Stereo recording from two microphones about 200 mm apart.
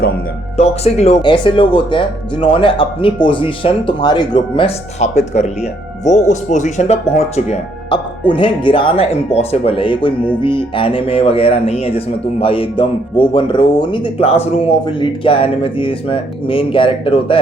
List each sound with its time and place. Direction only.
0.5 s speech: 35° left (ahead or behind)